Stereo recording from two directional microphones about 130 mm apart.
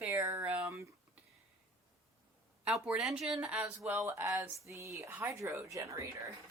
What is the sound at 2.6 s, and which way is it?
Speech, 5° right (ahead or behind).